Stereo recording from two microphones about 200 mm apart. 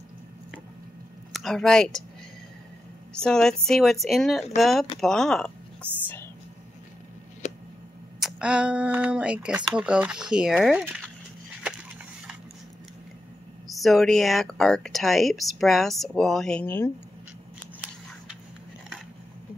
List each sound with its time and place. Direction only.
1.3 s speech: centre (ahead or behind)
3.2 s speech: 5° left (ahead or behind)
7.4 s a sound: 35° left (ahead or behind)
8.2 s speech: 5° right (ahead or behind)
13.7 s speech: centre (ahead or behind)